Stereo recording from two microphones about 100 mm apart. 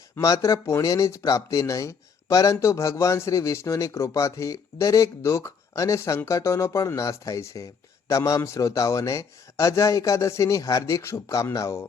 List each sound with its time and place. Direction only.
0.2 s speech: 35° left (ahead or behind)